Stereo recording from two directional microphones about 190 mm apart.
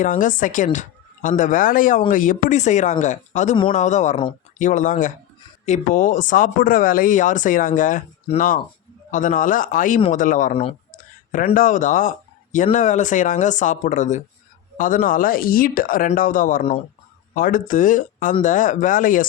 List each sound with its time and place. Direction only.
0.0 s speech: 45° left (ahead or behind)